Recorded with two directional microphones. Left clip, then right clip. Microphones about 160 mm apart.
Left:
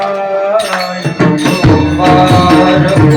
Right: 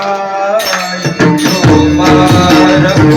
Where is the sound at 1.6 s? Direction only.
20° right (ahead or behind).